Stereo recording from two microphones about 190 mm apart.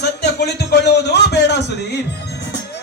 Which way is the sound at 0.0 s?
60° left (ahead or behind).